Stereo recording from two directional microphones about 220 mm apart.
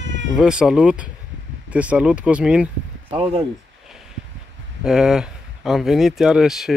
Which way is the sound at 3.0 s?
25° right (ahead or behind).